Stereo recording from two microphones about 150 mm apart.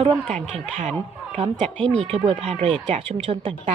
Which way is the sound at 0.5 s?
45° right (ahead or behind).